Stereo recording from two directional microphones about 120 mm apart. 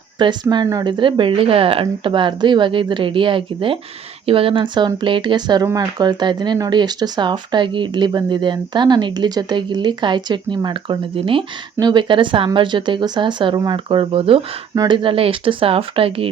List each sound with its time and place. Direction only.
0.2 s speech: 40° right (ahead or behind)
11.8 s speech: 40° right (ahead or behind)